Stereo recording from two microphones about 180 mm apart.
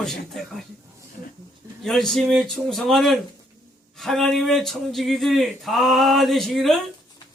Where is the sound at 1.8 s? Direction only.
Centre (ahead or behind).